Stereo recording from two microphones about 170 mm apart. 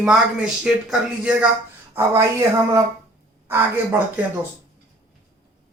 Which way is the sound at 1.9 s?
15° right (ahead or behind).